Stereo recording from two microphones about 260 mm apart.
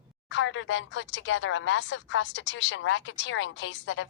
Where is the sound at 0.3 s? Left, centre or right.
Left.